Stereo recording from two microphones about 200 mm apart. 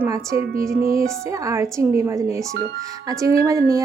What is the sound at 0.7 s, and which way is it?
Speech, 45° right (ahead or behind).